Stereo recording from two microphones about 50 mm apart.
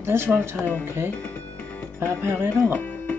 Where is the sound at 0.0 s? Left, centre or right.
Right.